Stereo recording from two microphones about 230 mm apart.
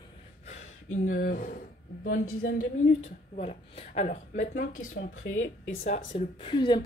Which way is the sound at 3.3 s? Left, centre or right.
Left.